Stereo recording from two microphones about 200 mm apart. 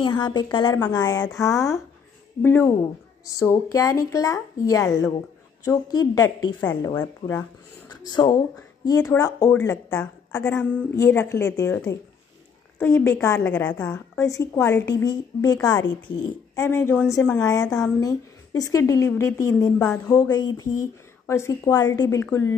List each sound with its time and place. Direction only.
0.0 s a woman's voice: 20° left (ahead or behind)